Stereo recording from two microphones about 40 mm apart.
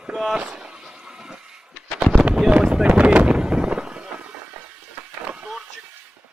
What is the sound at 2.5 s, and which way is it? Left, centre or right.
Boat, right.